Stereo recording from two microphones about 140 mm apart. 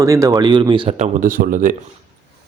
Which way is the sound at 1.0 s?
75° right (ahead or behind).